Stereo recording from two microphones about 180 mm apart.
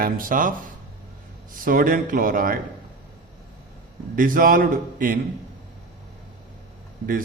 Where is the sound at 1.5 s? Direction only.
50° right (ahead or behind).